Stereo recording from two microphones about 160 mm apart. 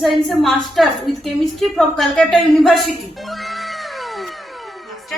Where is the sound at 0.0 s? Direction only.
Centre (ahead or behind).